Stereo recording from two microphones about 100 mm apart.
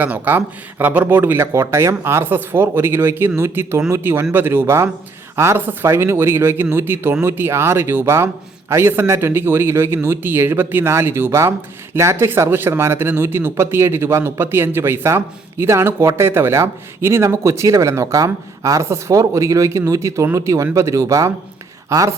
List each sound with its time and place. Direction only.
0.0 s a man's voice: 20° right (ahead or behind); by 22.1 s 35° right (ahead or behind)